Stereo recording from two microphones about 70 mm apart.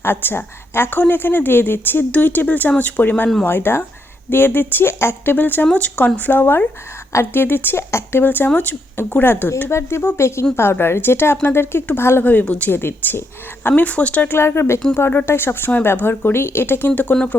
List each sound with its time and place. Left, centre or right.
0.0 s a woman's voice: left
7.1 s speech: left
7.4 s speech: left
12.2 s a woman's voice: left
14.3 s speech: left